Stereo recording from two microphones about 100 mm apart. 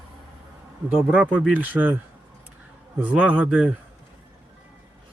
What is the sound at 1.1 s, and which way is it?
Speech, 15° right (ahead or behind).